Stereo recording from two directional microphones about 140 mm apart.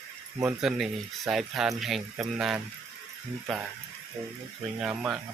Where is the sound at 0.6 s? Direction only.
Centre (ahead or behind).